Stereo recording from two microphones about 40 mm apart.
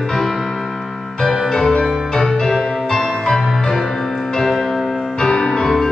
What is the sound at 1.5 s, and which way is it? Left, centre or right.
Music, centre.